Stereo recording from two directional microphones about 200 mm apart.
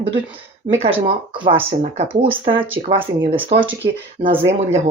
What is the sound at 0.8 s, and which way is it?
Speech, 30° right (ahead or behind).